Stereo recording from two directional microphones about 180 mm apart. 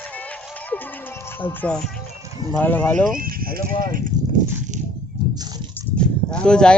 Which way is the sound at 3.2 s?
55° right (ahead or behind).